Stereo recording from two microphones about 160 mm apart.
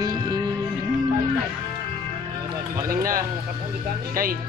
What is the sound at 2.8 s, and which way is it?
Speech, 60° right (ahead or behind).